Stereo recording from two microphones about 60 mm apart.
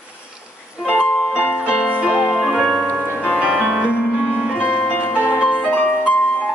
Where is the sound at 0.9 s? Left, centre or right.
Left.